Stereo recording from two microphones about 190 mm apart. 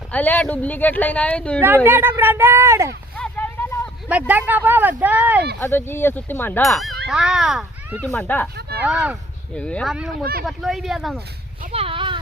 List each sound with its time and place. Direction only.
0.1 s speech: 10° left (ahead or behind)
1.6 s speech: 10° right (ahead or behind)
3.2 s vehicle: 10° left (ahead or behind)
4.3 s speech: 10° right (ahead or behind)
5.5 s speech: 10° left (ahead or behind)
6.7 s speech: centre (ahead or behind)
8.0 s speech: 5° left (ahead or behind)
8.8 s speech: 5° right (ahead or behind)
9.6 s speech: 5° left (ahead or behind)
11.7 s a sound: 30° right (ahead or behind)